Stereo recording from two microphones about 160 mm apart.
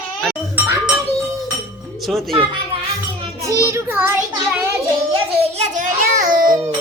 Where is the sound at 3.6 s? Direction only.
15° right (ahead or behind).